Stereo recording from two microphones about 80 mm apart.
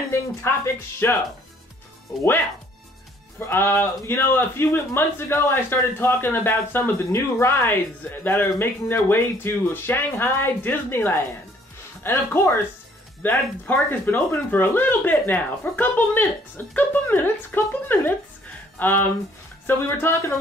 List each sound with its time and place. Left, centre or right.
0.5 s speech: left
3.3 s a man's voice: left